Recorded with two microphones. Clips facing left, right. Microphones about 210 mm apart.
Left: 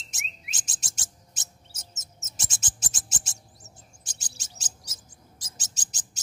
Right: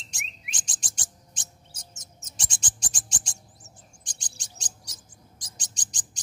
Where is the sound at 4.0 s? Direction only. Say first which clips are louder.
Left 1 dB; 5° left (ahead or behind).